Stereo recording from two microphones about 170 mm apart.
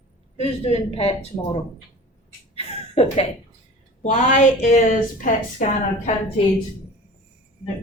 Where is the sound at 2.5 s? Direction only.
35° left (ahead or behind).